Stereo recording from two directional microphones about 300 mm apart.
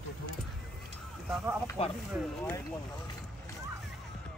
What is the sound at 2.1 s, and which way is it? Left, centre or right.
Speech, centre.